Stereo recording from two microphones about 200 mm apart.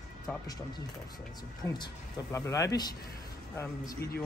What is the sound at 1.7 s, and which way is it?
Speech, 20° left (ahead or behind).